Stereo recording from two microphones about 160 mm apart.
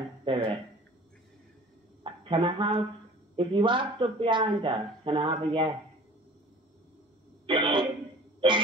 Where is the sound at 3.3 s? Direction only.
30° right (ahead or behind).